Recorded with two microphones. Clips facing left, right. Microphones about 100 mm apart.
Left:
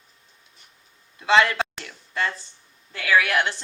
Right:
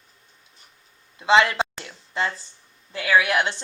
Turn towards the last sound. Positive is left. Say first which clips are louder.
# right 1 dB
turn(degrees=-25)  # may be behind; listen again after turning